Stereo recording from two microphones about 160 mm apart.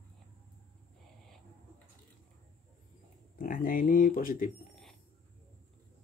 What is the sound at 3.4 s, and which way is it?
Speech, 60° left (ahead or behind).